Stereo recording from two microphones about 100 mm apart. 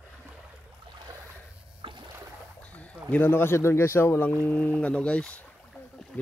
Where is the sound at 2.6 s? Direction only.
15° left (ahead or behind).